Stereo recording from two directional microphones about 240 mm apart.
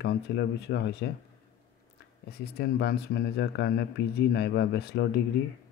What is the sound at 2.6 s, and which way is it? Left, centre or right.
Speech, left.